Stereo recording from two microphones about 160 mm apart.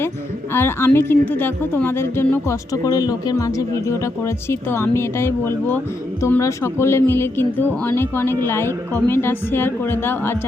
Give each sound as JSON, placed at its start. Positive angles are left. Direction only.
{"t": 0.5, "sound": "a woman's voice", "side_deg": 15}